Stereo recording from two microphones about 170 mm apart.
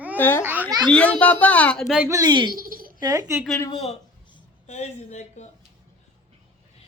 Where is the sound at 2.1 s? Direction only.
20° right (ahead or behind).